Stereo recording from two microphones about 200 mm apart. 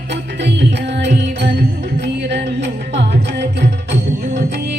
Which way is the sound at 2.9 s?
60° right (ahead or behind).